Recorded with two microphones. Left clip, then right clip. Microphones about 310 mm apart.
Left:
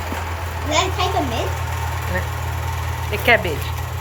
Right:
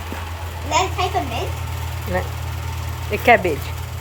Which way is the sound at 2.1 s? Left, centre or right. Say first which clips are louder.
Even; right.